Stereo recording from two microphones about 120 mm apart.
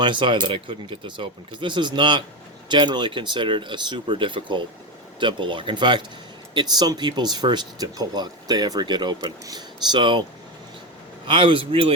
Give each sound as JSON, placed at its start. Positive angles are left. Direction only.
{"t": 0.0, "sound": "speech", "side_deg": -40}
{"t": 11.3, "sound": "a man's voice", "side_deg": -45}